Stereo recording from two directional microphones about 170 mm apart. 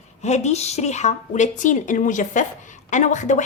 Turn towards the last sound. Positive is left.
turn(degrees=45)  # may be behind; listen again after turning